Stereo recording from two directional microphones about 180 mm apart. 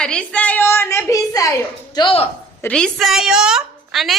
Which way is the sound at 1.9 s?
30° left (ahead or behind).